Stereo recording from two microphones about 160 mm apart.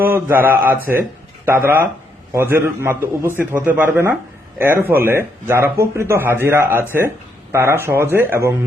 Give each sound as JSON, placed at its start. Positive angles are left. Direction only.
{"t": 0.0, "sound": "a man's voice", "side_deg": -15}